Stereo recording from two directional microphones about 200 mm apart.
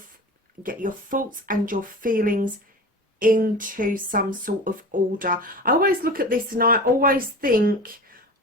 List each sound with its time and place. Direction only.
0.6 s speech: 40° right (ahead or behind)